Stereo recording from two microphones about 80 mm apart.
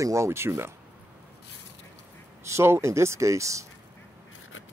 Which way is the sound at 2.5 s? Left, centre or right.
Right.